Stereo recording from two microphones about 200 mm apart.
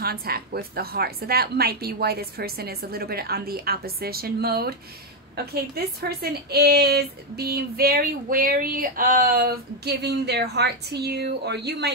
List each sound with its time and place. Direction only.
0.0 s a woman's voice: 50° right (ahead or behind)